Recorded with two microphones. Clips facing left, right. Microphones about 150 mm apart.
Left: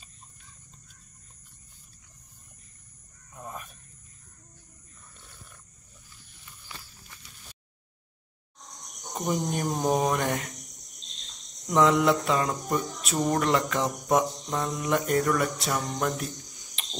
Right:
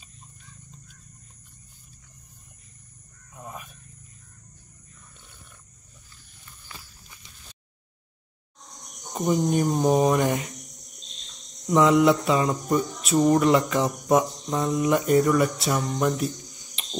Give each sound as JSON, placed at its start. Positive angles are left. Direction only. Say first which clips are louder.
{"t": 3.3, "sound": "wild animals", "louder": "even", "side_deg": 0}
{"t": 9.1, "sound": "speech", "louder": "right 6 dB", "side_deg": -5}
{"t": 11.7, "sound": "speech", "louder": "right 3 dB", "side_deg": -5}